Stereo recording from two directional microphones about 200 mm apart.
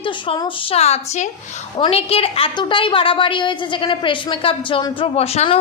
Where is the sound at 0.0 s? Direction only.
25° left (ahead or behind).